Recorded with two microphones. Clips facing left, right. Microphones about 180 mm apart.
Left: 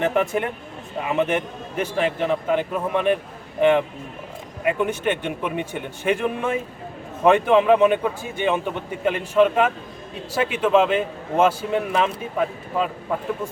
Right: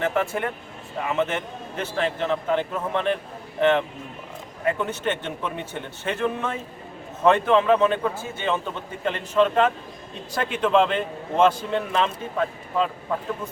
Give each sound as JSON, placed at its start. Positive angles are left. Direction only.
{"t": 0.0, "sound": "a man's voice", "side_deg": 15}